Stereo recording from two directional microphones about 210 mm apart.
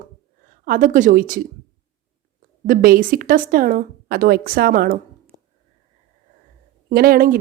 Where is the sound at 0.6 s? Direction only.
40° right (ahead or behind).